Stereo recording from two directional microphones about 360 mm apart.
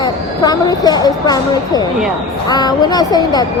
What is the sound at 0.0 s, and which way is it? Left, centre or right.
A woman's voice, centre.